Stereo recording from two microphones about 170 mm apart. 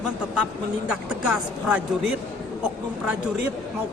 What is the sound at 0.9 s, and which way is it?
A woman's voice, 5° right (ahead or behind).